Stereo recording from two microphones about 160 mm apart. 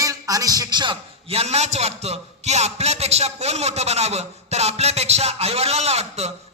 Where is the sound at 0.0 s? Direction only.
20° right (ahead or behind).